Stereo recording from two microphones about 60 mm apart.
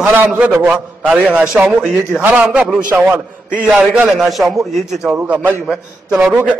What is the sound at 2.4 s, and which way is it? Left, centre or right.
A man's voice, right.